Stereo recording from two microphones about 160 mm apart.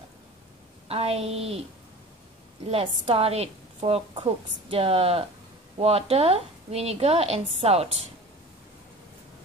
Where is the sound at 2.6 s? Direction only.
40° right (ahead or behind).